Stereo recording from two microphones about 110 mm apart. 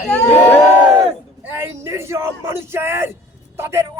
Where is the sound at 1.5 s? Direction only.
25° right (ahead or behind).